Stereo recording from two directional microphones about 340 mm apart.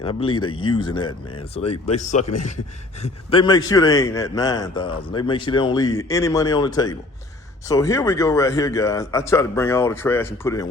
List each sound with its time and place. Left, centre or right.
0.0 s a man's voice: centre
2.2 s a man's voice: left
3.0 s a man's voice: centre